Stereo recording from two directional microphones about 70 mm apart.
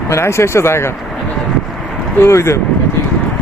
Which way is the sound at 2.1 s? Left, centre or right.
Left.